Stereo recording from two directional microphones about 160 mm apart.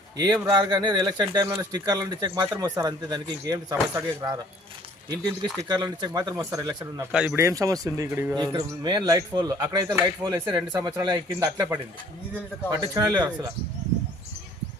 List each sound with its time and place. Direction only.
0.4 s speech: 25° right (ahead or behind)
7.1 s speech: 5° right (ahead or behind)
7.3 s speech: 20° right (ahead or behind)
8.4 s speech: 25° right (ahead or behind)
12.7 s speech: 20° right (ahead or behind)